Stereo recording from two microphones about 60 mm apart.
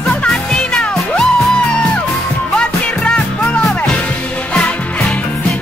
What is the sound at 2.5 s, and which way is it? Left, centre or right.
Music, centre.